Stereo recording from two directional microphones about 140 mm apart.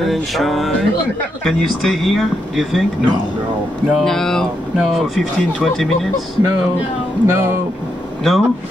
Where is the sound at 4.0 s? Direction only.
5° left (ahead or behind).